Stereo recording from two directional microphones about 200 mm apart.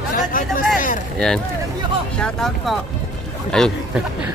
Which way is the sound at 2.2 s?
Centre (ahead or behind).